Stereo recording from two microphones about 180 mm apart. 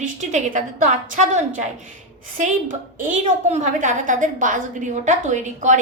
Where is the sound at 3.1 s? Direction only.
45° right (ahead or behind).